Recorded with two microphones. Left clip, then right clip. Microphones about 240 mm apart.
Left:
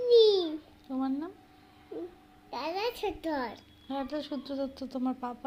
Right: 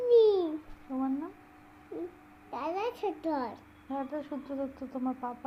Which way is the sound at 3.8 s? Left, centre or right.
Left.